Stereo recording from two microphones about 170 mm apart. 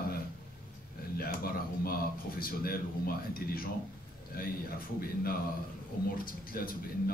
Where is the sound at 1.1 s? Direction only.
60° left (ahead or behind).